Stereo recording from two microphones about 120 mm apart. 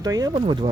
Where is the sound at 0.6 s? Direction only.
90° right.